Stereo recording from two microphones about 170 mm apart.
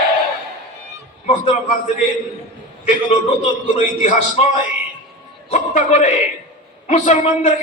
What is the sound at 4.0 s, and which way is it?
Speech, 40° left (ahead or behind).